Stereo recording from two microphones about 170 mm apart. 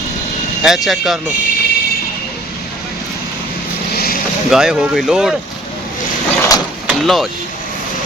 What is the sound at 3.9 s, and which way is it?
Boat, 60° left (ahead or behind).